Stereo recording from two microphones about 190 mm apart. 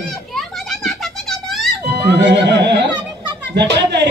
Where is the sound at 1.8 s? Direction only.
60° right (ahead or behind).